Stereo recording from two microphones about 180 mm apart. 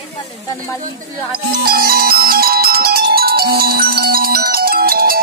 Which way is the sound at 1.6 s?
55° right (ahead or behind).